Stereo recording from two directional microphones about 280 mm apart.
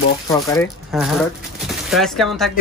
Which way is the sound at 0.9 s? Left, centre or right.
Centre.